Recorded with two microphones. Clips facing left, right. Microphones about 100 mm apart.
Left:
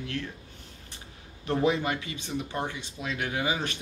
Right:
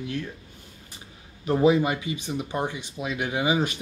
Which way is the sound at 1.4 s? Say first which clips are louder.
Right 6 dB; 10° right (ahead or behind).